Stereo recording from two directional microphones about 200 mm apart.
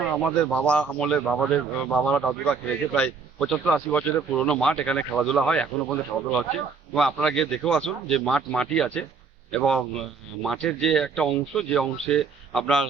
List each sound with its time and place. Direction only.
0.5 s a man's voice: 5° left (ahead or behind)